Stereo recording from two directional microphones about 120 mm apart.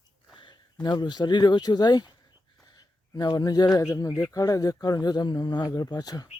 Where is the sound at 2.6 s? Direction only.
30° left (ahead or behind).